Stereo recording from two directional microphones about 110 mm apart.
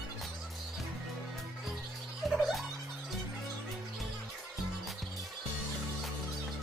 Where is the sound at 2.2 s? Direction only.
Centre (ahead or behind).